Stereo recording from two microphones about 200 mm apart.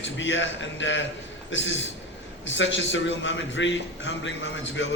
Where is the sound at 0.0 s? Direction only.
70° left (ahead or behind).